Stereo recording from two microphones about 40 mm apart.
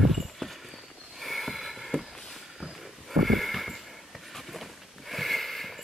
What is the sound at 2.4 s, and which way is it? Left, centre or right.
Sniff, centre.